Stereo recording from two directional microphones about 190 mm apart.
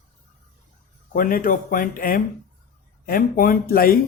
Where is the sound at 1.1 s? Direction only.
50° left (ahead or behind).